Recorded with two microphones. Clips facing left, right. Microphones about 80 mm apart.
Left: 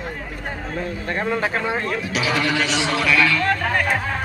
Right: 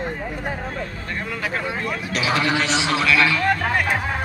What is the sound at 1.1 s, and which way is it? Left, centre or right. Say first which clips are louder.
Speech: left 4 dB; left.